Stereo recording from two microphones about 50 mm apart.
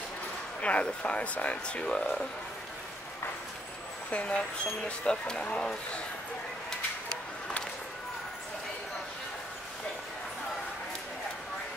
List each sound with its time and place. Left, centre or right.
0.6 s speech: left
4.1 s speech: left